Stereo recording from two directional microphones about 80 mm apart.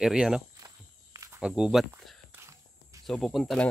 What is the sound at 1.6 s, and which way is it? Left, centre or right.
Speech, centre.